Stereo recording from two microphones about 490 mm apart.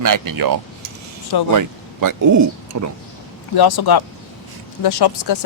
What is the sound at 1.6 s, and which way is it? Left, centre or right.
Speech, right.